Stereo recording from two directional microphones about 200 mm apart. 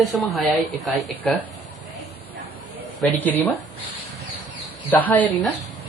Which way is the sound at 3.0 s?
10° left (ahead or behind).